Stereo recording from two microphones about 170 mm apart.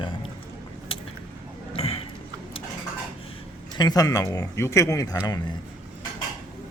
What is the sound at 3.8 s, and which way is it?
Speech, 20° left (ahead or behind).